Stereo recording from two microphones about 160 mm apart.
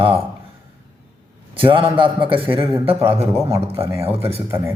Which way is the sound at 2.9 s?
15° right (ahead or behind).